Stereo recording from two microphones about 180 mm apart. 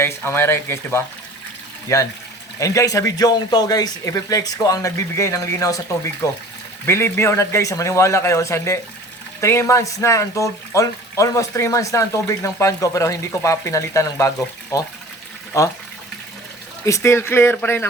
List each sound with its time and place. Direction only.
0.0 s speech: 15° left (ahead or behind)
16.8 s speech: 15° left (ahead or behind)